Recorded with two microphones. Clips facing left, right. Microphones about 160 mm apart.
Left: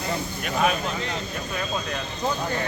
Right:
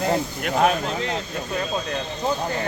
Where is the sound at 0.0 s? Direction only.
70° right (ahead or behind).